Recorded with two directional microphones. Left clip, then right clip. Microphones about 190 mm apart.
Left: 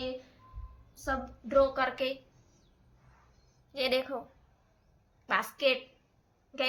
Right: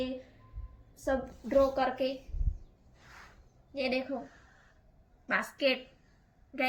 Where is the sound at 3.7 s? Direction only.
65° left (ahead or behind).